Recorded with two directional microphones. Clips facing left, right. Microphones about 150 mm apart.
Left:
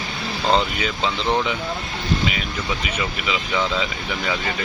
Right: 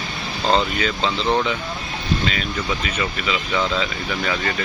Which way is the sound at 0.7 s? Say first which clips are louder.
Right 2 dB; 10° left (ahead or behind).